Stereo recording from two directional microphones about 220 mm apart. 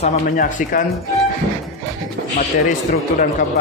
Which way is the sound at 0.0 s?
40° left (ahead or behind).